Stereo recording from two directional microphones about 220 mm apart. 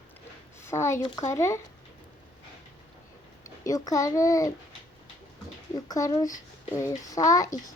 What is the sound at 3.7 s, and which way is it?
Speech, 15° left (ahead or behind).